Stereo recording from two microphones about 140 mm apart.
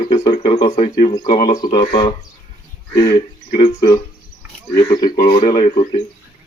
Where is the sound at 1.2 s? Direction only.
90° left.